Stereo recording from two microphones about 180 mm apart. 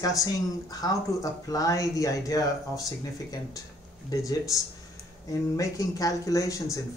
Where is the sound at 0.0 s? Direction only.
20° left (ahead or behind).